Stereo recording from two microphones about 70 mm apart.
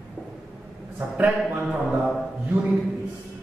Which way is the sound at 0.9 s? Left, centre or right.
Right.